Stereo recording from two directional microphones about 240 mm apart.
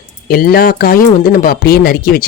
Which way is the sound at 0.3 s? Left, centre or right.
Left.